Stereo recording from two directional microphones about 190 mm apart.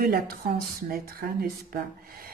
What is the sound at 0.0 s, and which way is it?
A woman's voice, 50° right (ahead or behind).